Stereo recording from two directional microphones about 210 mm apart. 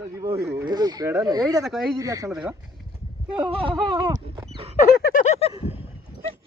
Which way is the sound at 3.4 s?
25° right (ahead or behind).